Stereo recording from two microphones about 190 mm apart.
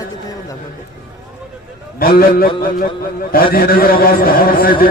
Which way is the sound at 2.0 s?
50° left (ahead or behind).